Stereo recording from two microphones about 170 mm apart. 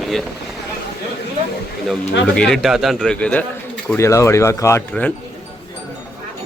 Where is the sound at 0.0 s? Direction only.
Centre (ahead or behind).